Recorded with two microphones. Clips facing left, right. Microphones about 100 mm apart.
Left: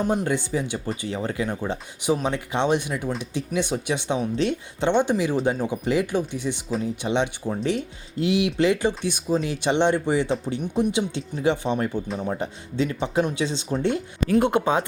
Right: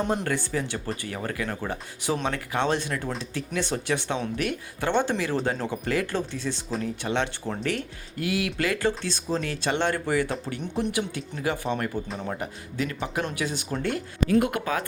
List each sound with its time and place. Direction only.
0.0 s speech: centre (ahead or behind)
0.3 s speech: 15° left (ahead or behind)